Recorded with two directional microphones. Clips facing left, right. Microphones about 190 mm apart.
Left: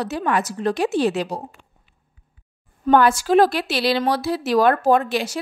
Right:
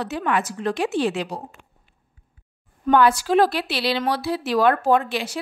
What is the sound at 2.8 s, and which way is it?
Speech, 45° left (ahead or behind).